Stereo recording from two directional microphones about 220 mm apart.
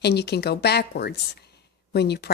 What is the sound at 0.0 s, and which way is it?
Speech, 50° left (ahead or behind).